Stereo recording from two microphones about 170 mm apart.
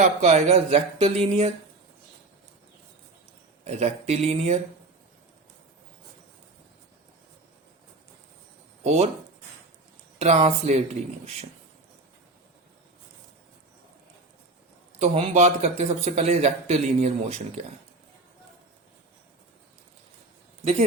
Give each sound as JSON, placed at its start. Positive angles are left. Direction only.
{"t": 0.2, "sound": "speech", "side_deg": -40}
{"t": 3.6, "sound": "speech", "side_deg": -40}
{"t": 8.8, "sound": "speech", "side_deg": -40}
{"t": 10.2, "sound": "speech", "side_deg": -40}
{"t": 14.9, "sound": "speech", "side_deg": -35}